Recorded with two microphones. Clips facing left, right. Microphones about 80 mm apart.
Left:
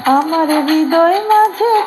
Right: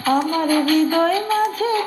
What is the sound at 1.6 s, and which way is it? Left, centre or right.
Child singing, left.